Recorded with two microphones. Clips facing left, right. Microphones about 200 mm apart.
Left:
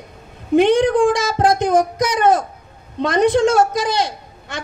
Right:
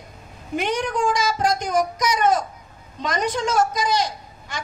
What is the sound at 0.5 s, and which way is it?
A woman's voice, 60° left (ahead or behind).